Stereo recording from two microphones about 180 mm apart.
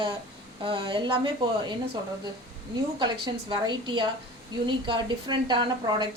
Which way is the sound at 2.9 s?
25° right (ahead or behind).